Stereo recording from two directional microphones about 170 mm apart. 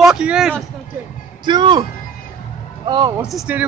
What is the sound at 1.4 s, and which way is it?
Speech, 25° right (ahead or behind).